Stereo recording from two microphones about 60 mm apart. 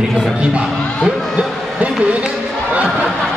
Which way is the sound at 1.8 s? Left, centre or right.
Centre.